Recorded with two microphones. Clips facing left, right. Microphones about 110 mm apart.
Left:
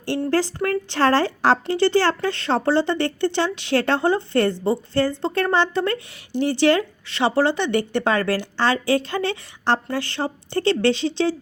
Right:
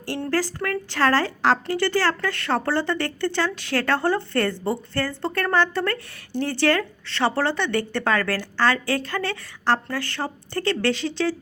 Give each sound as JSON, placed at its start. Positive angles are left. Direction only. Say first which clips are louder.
{"t": 0.0, "sound": "a woman's voice", "louder": "left 4 dB", "side_deg": 25}